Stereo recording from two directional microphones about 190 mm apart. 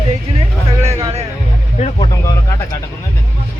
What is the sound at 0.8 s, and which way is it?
Music, 15° right (ahead or behind).